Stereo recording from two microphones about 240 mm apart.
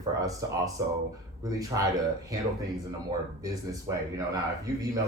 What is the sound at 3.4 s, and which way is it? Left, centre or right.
Speech, centre.